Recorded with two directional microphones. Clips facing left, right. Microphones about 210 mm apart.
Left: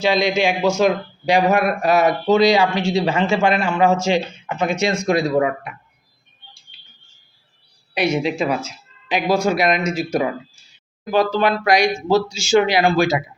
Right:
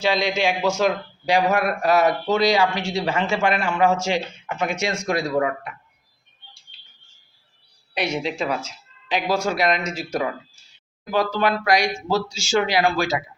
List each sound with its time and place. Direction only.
0.0 s speech: 15° left (ahead or behind)
6.7 s a sound: 10° left (ahead or behind)
7.9 s speech: 5° left (ahead or behind)